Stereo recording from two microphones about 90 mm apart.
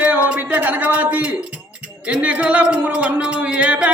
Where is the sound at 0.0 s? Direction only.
15° right (ahead or behind).